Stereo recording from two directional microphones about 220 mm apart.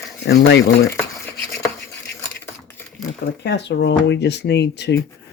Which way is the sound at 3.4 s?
50° left (ahead or behind).